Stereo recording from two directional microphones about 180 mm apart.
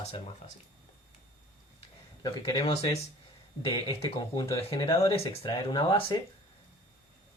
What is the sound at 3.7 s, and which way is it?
Speech, 25° left (ahead or behind).